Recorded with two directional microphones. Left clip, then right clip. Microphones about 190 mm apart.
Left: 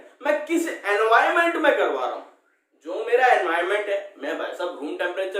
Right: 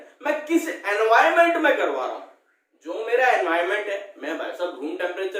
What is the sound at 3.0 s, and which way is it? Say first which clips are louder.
A man's voice: left 1 dB; 10° left (ahead or behind).